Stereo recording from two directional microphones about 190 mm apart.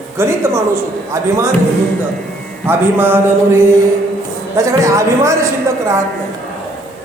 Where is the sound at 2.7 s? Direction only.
10° right (ahead or behind).